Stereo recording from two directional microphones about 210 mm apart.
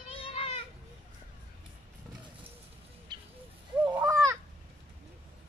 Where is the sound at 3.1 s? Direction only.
20° right (ahead or behind).